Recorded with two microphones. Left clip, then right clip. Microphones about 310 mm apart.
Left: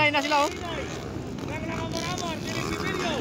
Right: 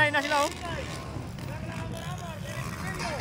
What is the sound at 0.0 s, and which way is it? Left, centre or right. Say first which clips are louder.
Vehicle: left 2 dB; centre.